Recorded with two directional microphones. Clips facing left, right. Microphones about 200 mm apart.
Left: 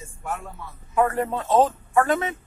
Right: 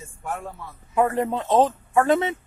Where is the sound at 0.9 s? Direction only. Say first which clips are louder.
Right 1 dB; 20° right (ahead or behind).